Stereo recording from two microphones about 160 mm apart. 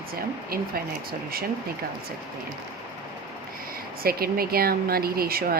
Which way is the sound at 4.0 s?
70° right (ahead or behind).